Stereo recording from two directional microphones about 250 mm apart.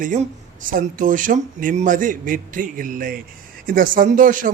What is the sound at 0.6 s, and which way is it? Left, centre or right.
Speech, right.